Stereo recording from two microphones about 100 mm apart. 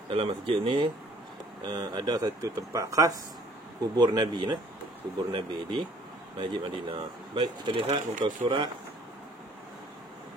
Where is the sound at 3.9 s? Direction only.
45° right (ahead or behind).